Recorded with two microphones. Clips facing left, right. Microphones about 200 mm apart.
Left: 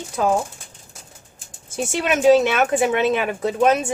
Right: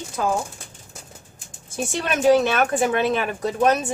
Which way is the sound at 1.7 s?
25° left (ahead or behind).